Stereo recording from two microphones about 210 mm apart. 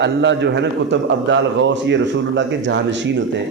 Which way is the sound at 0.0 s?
55° right (ahead or behind).